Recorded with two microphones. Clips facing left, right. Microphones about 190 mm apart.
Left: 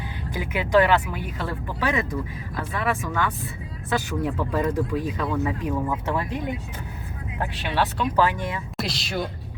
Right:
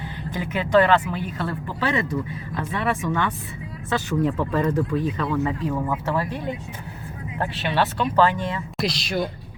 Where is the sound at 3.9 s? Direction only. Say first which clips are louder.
Right 3 dB; 10° left (ahead or behind).